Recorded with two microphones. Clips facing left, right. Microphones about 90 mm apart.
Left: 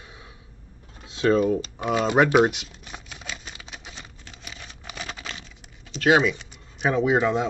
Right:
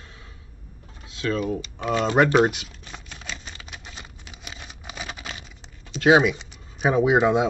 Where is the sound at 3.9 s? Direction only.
10° right (ahead or behind).